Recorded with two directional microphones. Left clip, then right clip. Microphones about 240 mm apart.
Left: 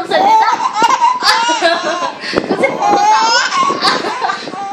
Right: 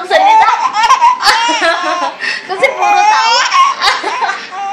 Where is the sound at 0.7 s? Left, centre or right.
Centre.